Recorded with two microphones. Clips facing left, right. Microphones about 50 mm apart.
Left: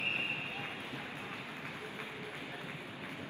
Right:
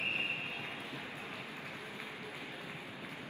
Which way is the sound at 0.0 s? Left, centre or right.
Left.